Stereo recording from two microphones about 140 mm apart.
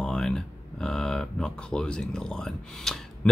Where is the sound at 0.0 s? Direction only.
5° left (ahead or behind).